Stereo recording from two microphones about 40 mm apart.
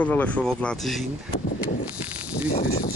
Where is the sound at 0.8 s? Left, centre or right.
Centre.